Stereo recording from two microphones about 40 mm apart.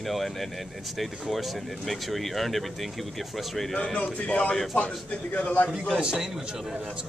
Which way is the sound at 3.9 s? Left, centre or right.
Left.